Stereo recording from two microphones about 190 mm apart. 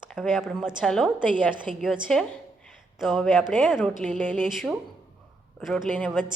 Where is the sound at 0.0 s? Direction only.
Centre (ahead or behind).